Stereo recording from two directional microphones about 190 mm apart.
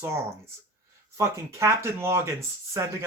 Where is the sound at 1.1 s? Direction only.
15° right (ahead or behind).